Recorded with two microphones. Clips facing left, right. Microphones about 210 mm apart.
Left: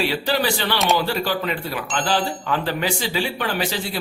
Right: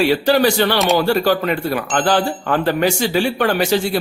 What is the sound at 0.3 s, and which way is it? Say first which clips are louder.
A man's voice: right 8 dB; 45° right (ahead or behind).